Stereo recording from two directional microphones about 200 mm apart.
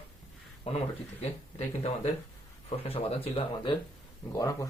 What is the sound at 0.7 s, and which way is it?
Speech, 30° left (ahead or behind).